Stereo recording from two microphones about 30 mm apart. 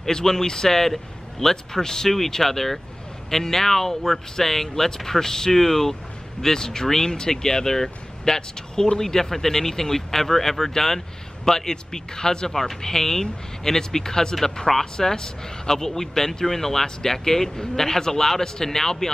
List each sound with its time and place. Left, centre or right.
0.1 s speech: centre
2.0 s speech: centre